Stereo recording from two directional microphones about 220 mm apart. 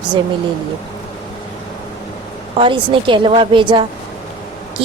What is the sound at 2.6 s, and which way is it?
Speech, 20° right (ahead or behind).